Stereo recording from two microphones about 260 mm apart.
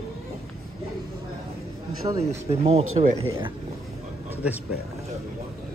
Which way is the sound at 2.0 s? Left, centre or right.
Centre.